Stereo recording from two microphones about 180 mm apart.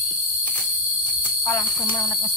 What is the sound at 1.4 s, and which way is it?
Speech, 15° left (ahead or behind).